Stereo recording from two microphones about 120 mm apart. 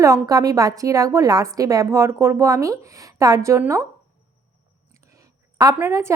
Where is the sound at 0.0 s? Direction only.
30° right (ahead or behind).